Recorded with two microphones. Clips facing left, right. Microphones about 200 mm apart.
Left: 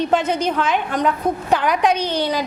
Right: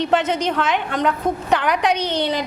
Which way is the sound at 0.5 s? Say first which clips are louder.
Left 1 dB; 65° right (ahead or behind).